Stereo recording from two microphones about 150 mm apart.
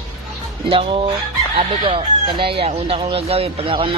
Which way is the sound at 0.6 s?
40° right (ahead or behind).